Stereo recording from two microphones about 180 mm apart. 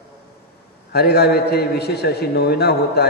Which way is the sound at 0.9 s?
60° left (ahead or behind).